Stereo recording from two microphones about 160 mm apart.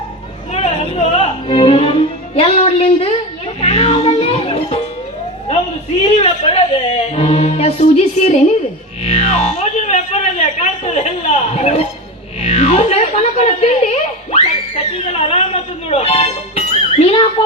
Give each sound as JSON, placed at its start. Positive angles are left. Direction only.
{"t": 0.5, "sound": "music", "side_deg": 40}
{"t": 6.0, "sound": "music", "side_deg": 40}